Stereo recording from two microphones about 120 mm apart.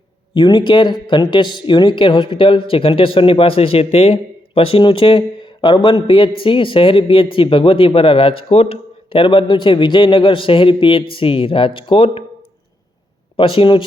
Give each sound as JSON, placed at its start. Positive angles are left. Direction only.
{"t": 0.3, "sound": "speech", "side_deg": 40}
{"t": 13.3, "sound": "speech", "side_deg": 50}